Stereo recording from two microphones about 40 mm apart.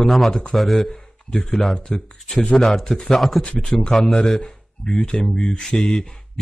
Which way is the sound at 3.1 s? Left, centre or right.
Centre.